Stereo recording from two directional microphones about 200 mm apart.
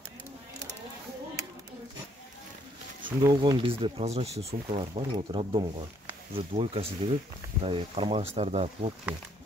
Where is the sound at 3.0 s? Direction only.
20° right (ahead or behind).